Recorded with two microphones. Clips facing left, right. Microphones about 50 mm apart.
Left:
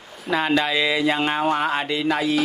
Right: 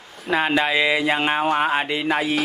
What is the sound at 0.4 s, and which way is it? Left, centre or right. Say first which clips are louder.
Speech: right 1 dB; right.